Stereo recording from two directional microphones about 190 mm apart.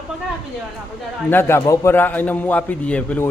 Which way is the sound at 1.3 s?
10° left (ahead or behind).